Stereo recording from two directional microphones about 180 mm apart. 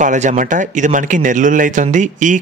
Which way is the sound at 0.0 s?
45° right (ahead or behind).